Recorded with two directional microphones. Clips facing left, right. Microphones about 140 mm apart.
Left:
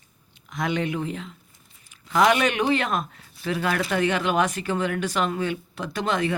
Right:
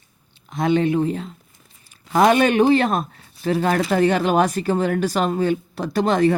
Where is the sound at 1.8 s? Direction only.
35° right (ahead or behind).